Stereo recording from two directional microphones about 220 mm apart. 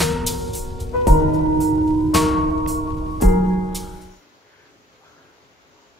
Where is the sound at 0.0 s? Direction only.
Centre (ahead or behind).